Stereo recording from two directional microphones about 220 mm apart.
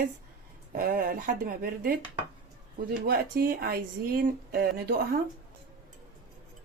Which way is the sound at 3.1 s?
40° right (ahead or behind).